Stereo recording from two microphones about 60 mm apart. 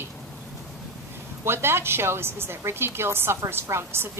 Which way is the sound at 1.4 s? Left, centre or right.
Right.